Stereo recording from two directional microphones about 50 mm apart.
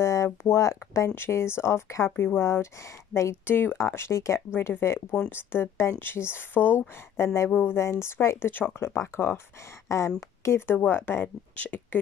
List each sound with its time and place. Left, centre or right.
0.0 s speech: left
1.1 s speech: left
2.0 s speech: left
3.4 s speech: left
3.7 s speech: left
4.6 s speech: left
7.8 s speech: left
8.5 s speech: left
9.8 s speech: left
10.9 s speech: left
11.5 s speech: left